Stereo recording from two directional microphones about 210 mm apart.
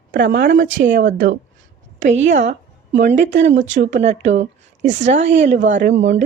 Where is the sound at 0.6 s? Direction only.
65° right (ahead or behind).